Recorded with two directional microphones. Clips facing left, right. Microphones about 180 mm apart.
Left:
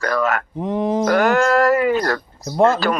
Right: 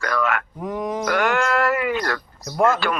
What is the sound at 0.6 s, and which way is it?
Speech, 25° left (ahead or behind).